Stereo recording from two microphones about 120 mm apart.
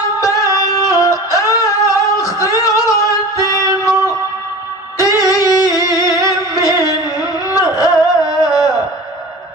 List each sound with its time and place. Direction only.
0.2 s music: 30° left (ahead or behind)
5.3 s music: 30° left (ahead or behind)